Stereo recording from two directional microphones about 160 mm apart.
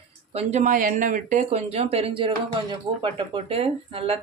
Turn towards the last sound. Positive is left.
turn(degrees=-40)  # may be behind; listen again after turning